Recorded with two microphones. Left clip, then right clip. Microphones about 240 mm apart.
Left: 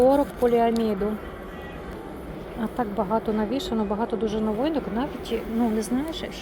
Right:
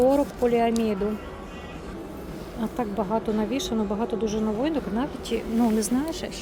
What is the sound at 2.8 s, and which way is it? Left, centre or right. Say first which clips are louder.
A woman's voice: left 2 dB; centre.